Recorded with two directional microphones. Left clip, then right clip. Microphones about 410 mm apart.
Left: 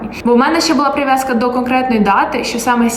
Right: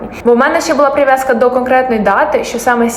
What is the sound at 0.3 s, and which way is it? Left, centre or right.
A woman's voice, centre.